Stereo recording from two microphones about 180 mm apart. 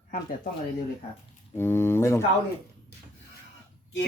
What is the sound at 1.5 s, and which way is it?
Speech, 15° left (ahead or behind).